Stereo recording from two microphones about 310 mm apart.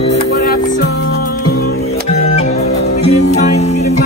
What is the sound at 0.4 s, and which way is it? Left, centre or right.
Music, left.